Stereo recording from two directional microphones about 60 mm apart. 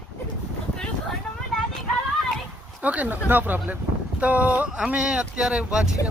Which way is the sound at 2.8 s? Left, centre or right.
Right.